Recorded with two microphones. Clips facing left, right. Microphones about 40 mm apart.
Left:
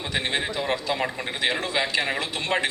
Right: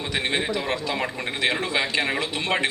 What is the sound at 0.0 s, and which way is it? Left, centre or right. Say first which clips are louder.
A man's voice: right 1 dB; centre.